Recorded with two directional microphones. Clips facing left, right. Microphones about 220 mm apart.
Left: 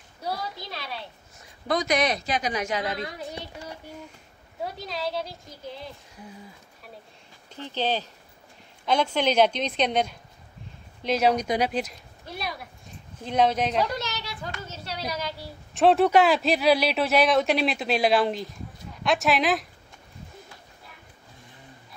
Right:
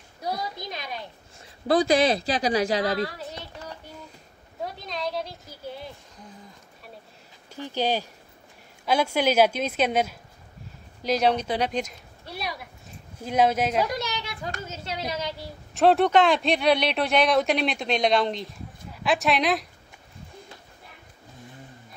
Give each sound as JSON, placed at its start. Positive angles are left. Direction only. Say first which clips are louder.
{"t": 0.2, "sound": "a woman's voice", "louder": "right 1 dB", "side_deg": -15}
{"t": 1.7, "sound": "speech", "louder": "right 4 dB", "side_deg": -30}
{"t": 3.1, "sound": "a sound", "louder": "left 2 dB", "side_deg": 15}
{"t": 4.7, "sound": "speech", "louder": "even", "side_deg": 5}
{"t": 7.5, "sound": "a woman's voice", "louder": "right 2 dB", "side_deg": -10}
{"t": 15.7, "sound": "speech", "louder": "even", "side_deg": 0}